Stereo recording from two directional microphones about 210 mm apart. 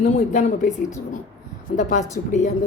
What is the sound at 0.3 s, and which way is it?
Speech, 35° left (ahead or behind).